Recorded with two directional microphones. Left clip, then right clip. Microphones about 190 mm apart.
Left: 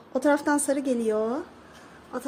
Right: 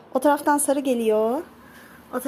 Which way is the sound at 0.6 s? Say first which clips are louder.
Right 4 dB; 25° left (ahead or behind).